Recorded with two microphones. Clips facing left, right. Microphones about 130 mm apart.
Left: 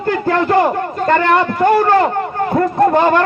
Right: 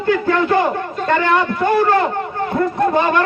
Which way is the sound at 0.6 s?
45° left (ahead or behind).